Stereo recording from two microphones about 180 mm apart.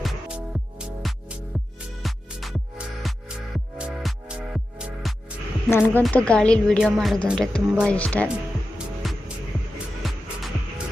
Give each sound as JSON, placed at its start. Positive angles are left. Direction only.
{"t": 0.0, "sound": "music", "side_deg": -5}
{"t": 5.7, "sound": "a woman's voice", "side_deg": 10}
{"t": 9.0, "sound": "music", "side_deg": 0}